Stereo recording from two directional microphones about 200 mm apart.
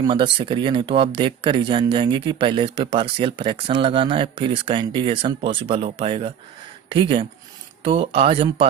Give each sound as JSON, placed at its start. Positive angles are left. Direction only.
{"t": 0.0, "sound": "speech", "side_deg": -25}